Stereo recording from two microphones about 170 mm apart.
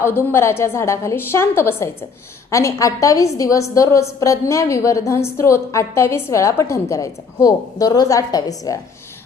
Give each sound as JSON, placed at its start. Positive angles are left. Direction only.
{"t": 0.0, "sound": "a woman's voice", "side_deg": 15}